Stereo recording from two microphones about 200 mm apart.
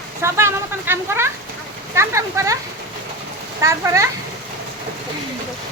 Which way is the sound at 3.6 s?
15° right (ahead or behind).